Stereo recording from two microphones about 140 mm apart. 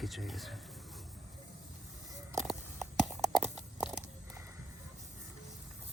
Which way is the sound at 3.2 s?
5° right (ahead or behind).